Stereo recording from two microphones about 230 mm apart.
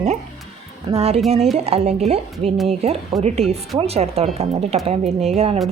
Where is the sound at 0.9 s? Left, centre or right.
Right.